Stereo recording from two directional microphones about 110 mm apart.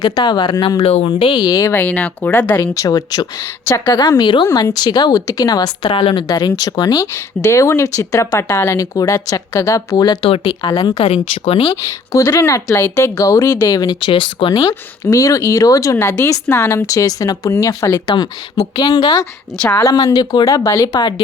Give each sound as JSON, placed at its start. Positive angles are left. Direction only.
{"t": 0.0, "sound": "speech", "side_deg": 40}
{"t": 0.8, "sound": "speech", "side_deg": 70}
{"t": 1.0, "sound": "speech", "side_deg": 45}
{"t": 1.7, "sound": "speech", "side_deg": 15}
{"t": 2.7, "sound": "speech", "side_deg": 35}
{"t": 5.9, "sound": "speech", "side_deg": 55}
{"t": 6.2, "sound": "speech", "side_deg": 40}
{"t": 7.0, "sound": "speech", "side_deg": 30}
{"t": 10.2, "sound": "speech", "side_deg": 55}
{"t": 10.9, "sound": "speech", "side_deg": 65}
{"t": 12.1, "sound": "speech", "side_deg": 30}
{"t": 15.0, "sound": "speech", "side_deg": 30}
{"t": 19.5, "sound": "speech", "side_deg": 15}
{"t": 19.8, "sound": "speech", "side_deg": 30}